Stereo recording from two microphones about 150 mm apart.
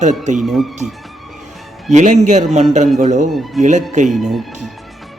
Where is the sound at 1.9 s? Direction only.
50° right (ahead or behind).